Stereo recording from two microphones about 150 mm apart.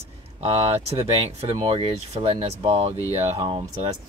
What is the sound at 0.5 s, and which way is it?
Speech, 45° right (ahead or behind).